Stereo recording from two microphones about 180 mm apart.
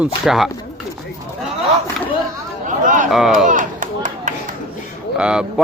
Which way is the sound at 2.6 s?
45° right (ahead or behind).